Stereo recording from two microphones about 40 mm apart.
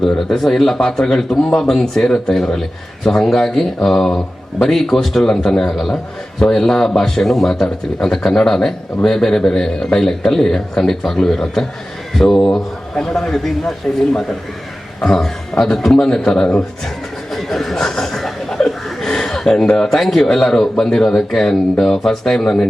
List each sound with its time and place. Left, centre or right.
0.4 s a man's voice: centre
7.9 s a man's voice: centre
15.0 s a man's voice: centre
17.3 s chuckle: centre